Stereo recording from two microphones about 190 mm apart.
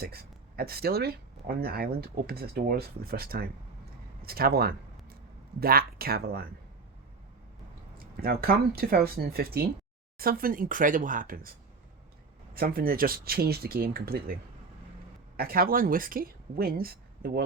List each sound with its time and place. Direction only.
0.0 s speech: 55° right (ahead or behind)
7.9 s speech: 50° right (ahead or behind)
12.5 s speech: 50° right (ahead or behind)
15.4 s speech: 50° right (ahead or behind)